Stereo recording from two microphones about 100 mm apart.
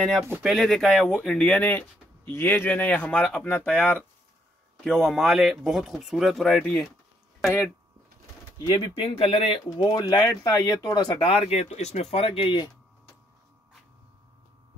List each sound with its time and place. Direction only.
0.4 s speech: centre (ahead or behind)
6.6 s speech: 20° left (ahead or behind)
8.5 s speech: 50° left (ahead or behind)
8.9 s speech: 70° left (ahead or behind)
9.7 s speech: 45° left (ahead or behind)
11.1 s speech: 75° left (ahead or behind)